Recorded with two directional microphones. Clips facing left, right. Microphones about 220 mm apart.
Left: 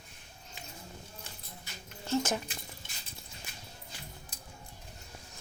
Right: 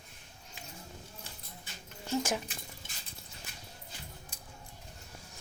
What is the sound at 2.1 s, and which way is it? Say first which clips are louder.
Speech: left 2 dB; 10° right (ahead or behind).